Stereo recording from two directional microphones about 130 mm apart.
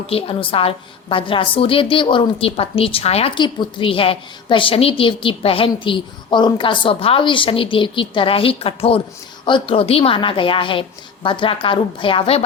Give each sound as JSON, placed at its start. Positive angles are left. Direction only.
{"t": 0.1, "sound": "a woman's voice", "side_deg": 45}
{"t": 3.3, "sound": "a woman's voice", "side_deg": 35}